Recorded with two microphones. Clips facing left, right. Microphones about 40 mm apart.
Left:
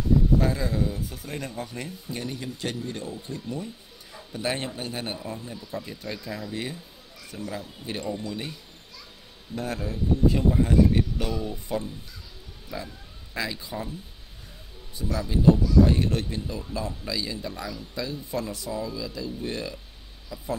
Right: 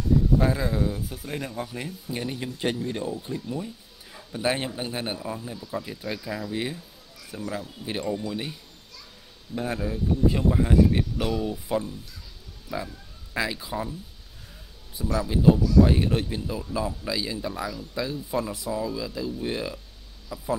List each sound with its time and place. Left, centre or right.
0.4 s speech: centre
9.6 s speech: centre
15.0 s speech: centre